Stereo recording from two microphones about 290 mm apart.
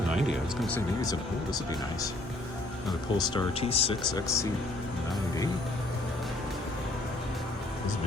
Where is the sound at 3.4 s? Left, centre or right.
Left.